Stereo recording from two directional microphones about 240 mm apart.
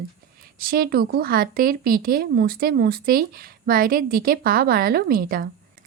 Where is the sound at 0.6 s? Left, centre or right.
Right.